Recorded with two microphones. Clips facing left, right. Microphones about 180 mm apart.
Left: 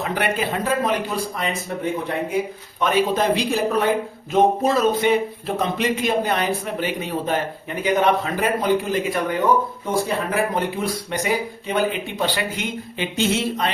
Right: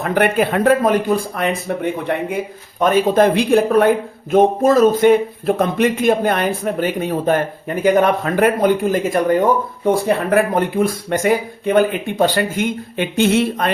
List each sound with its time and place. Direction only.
0.0 s speech: 55° right (ahead or behind)
2.8 s a man's voice: 50° right (ahead or behind)
9.8 s a man's voice: 60° right (ahead or behind)